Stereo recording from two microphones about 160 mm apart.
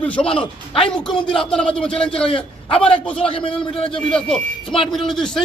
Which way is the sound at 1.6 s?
5° left (ahead or behind).